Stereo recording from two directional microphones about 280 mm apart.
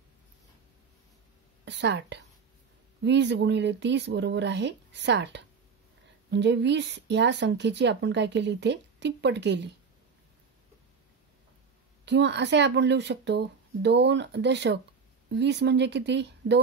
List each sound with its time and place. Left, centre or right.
1.6 s a woman's voice: right
12.0 s speech: right